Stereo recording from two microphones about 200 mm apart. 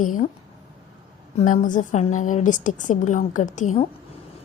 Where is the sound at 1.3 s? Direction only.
40° left (ahead or behind).